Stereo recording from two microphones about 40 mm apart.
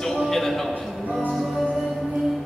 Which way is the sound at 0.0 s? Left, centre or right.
Centre.